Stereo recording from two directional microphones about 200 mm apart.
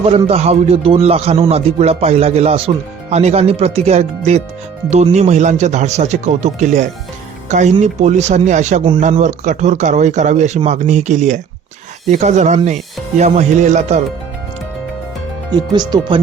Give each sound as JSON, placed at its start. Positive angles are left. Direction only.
{"t": 0.3, "sound": "speech", "side_deg": -30}
{"t": 15.5, "sound": "speech", "side_deg": -20}